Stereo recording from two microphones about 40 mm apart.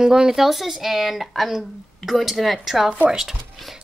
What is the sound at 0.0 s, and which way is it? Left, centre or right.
Speech, centre.